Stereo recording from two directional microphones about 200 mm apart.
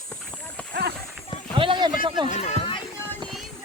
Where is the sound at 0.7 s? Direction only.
55° right (ahead or behind).